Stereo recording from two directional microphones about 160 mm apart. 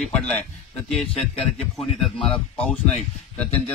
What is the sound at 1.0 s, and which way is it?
Speech, 35° left (ahead or behind).